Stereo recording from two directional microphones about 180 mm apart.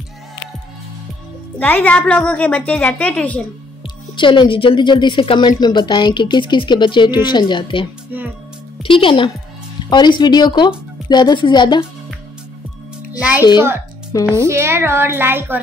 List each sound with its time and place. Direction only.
1.6 s a woman's voice: 10° left (ahead or behind)
4.2 s speech: 25° left (ahead or behind)
13.2 s a woman's voice: 10° right (ahead or behind)